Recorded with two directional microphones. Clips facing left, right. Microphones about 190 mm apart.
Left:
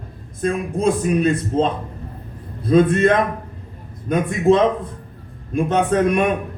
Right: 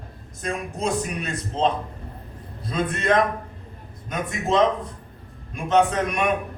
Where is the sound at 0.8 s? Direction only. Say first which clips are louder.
Left 9 dB; 55° left (ahead or behind).